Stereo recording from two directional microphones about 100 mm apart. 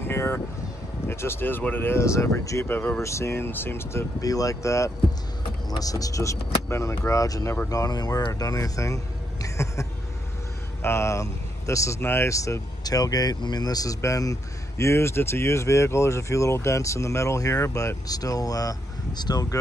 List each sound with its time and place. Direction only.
0.0 s a sound: 25° left (ahead or behind)
1.0 s speech: 25° left (ahead or behind)
2.6 s speech: 15° left (ahead or behind)
3.0 s speech: 30° left (ahead or behind)
4.2 s speech: 35° left (ahead or behind)